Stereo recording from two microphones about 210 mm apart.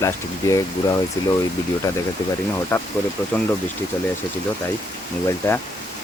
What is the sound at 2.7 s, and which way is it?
Speech, 10° left (ahead or behind).